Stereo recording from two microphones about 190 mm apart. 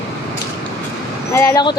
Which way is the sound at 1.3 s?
15° left (ahead or behind).